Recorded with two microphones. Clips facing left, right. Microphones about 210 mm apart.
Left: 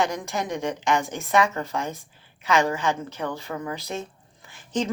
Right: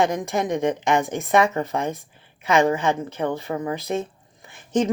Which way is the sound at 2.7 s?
55° right (ahead or behind).